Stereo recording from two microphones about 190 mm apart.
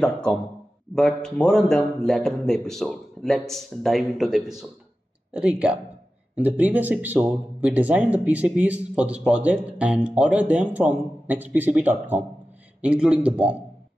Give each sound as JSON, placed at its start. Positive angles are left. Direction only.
{"t": 0.0, "sound": "a man's voice", "side_deg": 5}